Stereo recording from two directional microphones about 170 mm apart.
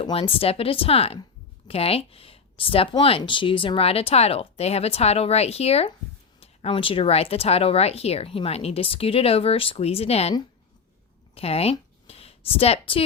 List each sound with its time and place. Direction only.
0.0 s speech: 35° left (ahead or behind)
11.3 s speech: 35° left (ahead or behind)